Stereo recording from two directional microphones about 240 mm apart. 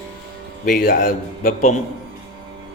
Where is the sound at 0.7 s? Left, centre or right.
Left.